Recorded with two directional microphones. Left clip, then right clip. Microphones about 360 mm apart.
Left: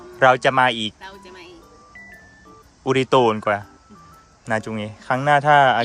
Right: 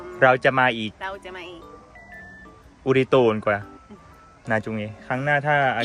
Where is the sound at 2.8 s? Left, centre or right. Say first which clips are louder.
Left 1 dB; centre.